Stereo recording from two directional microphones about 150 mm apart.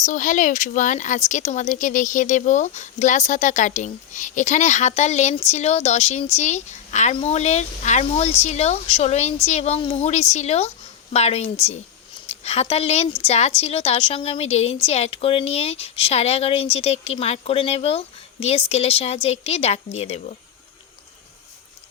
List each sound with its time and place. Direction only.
0.0 s speech: 60° left (ahead or behind)